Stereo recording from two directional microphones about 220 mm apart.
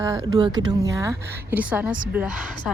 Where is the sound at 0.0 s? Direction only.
15° right (ahead or behind).